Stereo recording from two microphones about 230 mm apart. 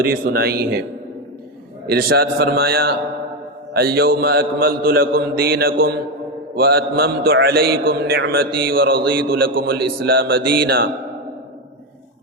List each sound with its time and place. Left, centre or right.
0.0 s a man's voice: right
1.9 s a man's voice: right